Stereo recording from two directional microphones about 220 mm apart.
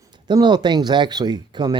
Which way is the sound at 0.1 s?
20° right (ahead or behind).